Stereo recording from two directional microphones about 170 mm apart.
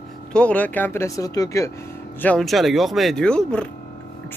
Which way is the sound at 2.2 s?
5° left (ahead or behind).